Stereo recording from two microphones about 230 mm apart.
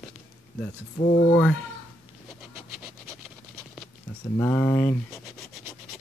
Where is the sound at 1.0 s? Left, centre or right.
Left.